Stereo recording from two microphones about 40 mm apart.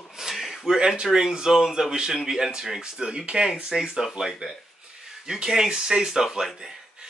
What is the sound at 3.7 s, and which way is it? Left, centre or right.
Speech, centre.